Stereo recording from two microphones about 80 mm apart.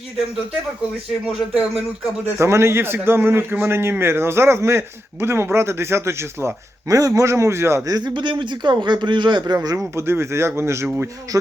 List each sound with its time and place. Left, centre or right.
2.4 s a man's voice: right
7.9 s a man's voice: right
8.1 s a man's voice: right
9.6 s a man's voice: right